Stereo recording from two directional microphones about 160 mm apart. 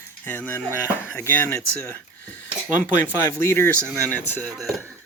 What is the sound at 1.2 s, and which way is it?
Speech, 10° left (ahead or behind).